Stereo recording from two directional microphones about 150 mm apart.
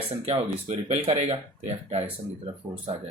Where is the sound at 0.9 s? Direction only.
45° right (ahead or behind).